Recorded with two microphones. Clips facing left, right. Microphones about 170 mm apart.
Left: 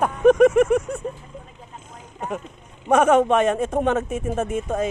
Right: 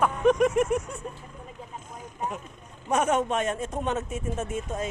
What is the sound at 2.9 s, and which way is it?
Speech, 60° left (ahead or behind).